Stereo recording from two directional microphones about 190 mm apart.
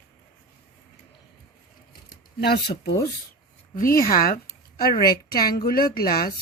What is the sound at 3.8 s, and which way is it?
Speech, 50° left (ahead or behind).